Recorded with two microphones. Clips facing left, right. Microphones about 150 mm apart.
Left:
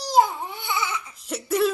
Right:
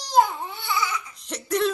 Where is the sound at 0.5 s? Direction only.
20° left (ahead or behind).